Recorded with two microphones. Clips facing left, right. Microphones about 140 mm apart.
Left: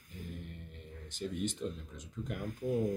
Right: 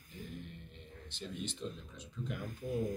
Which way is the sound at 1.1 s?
45° left (ahead or behind).